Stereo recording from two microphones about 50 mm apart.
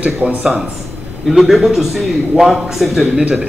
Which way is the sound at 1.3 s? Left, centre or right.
Centre.